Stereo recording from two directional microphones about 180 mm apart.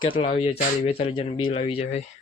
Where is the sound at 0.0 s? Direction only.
30° left (ahead or behind).